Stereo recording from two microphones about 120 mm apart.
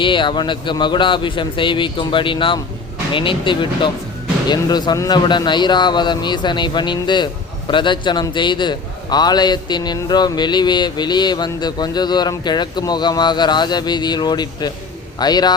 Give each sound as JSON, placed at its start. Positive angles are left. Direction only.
{"t": 0.0, "sound": "a man's voice", "side_deg": 40}